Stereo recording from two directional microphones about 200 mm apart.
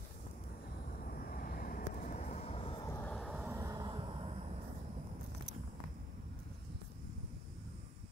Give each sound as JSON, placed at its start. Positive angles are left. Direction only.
{"t": 1.0, "sound": "vehicle", "side_deg": 45}
{"t": 3.2, "sound": "vehicle", "side_deg": -5}
{"t": 3.4, "sound": "vehicle", "side_deg": -15}